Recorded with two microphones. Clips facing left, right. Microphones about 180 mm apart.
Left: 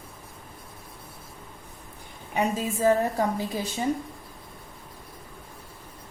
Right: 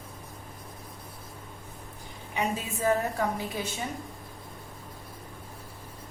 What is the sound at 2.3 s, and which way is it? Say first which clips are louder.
A woman's voice: left 5 dB; 35° left (ahead or behind).